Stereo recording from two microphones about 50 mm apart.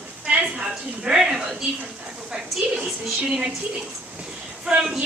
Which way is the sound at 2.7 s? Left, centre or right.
Centre.